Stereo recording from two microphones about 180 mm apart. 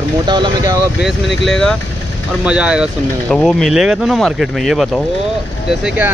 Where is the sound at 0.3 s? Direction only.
20° right (ahead or behind).